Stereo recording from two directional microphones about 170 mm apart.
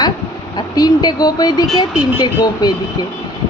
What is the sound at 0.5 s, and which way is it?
Speech, 25° left (ahead or behind).